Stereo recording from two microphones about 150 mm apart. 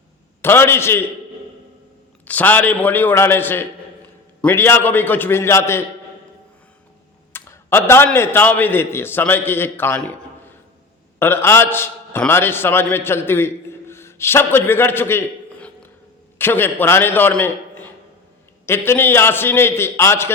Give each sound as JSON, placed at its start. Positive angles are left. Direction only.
{"t": 0.4, "sound": "a man's voice", "side_deg": 15}
{"t": 2.2, "sound": "a man's voice", "side_deg": 10}
{"t": 7.3, "sound": "a man's voice", "side_deg": 15}
{"t": 11.2, "sound": "a man's voice", "side_deg": 15}
{"t": 16.4, "sound": "a man's voice", "side_deg": 15}